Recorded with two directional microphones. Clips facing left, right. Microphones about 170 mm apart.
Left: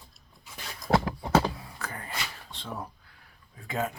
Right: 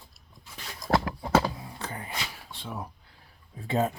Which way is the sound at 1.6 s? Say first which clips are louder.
Right 2 dB; 25° right (ahead or behind).